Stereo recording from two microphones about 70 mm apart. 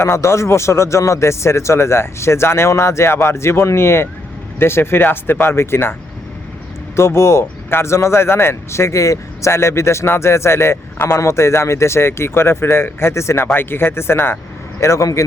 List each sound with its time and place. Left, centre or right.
0.0 s speech: left
6.9 s speech: left